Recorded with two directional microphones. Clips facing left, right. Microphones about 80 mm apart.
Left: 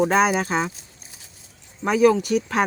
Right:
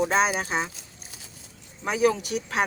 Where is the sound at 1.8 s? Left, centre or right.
Left.